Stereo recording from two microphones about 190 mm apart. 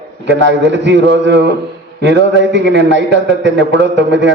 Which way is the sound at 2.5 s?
70° right (ahead or behind).